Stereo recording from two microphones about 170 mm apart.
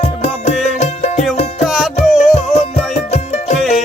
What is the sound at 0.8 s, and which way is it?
Music, 40° left (ahead or behind).